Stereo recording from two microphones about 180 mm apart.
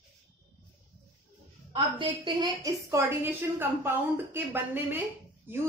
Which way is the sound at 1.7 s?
30° right (ahead or behind).